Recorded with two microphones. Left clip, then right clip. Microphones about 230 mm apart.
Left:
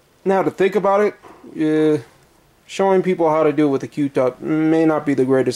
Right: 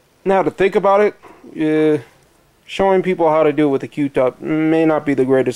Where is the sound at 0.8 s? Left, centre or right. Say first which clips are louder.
Right 3 dB; centre.